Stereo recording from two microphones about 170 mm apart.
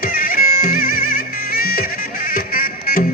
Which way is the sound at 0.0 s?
55° left (ahead or behind).